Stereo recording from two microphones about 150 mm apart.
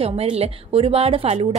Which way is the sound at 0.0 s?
40° right (ahead or behind).